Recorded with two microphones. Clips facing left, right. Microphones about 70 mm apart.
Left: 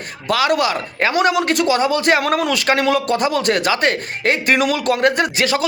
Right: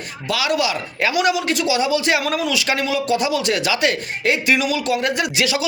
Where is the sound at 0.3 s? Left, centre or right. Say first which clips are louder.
Left 4 dB; left.